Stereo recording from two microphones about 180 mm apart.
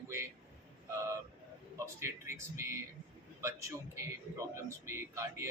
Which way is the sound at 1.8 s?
15° right (ahead or behind).